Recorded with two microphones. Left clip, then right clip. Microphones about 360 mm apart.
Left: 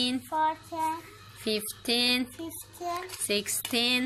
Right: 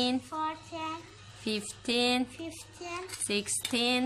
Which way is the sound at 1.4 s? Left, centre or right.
Centre.